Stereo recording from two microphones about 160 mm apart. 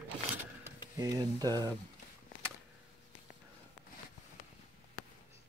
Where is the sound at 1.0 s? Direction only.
25° right (ahead or behind).